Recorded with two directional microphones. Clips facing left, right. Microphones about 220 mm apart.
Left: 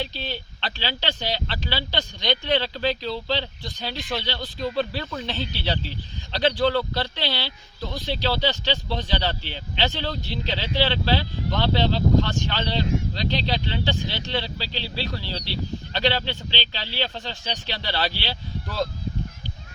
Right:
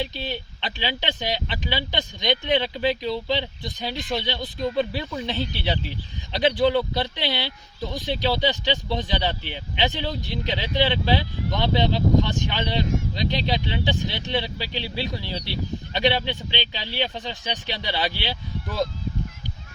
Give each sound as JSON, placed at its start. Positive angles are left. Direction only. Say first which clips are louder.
{"t": 0.3, "sound": "speech", "louder": "right 1 dB", "side_deg": -15}
{"t": 6.6, "sound": "speech", "louder": "right 2 dB", "side_deg": -20}